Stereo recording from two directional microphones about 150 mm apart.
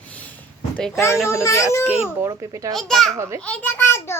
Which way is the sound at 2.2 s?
20° right (ahead or behind).